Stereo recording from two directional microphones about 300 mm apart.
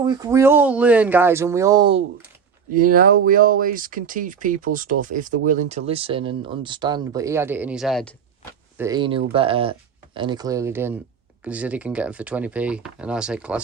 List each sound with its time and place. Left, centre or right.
0.0 s speech: centre
2.7 s speech: right; by 8.1 s centre
8.8 s speech: centre